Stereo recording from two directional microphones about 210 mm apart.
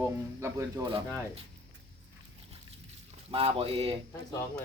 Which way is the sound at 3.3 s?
25° right (ahead or behind).